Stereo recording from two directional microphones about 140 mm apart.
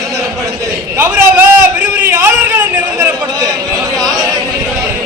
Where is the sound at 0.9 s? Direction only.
15° right (ahead or behind).